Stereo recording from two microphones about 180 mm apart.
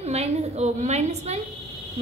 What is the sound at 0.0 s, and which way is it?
A woman's voice, 35° right (ahead or behind).